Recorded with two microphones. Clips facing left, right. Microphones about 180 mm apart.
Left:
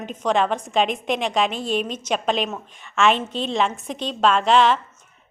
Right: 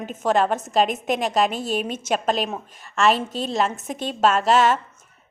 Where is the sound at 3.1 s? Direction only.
45° right (ahead or behind).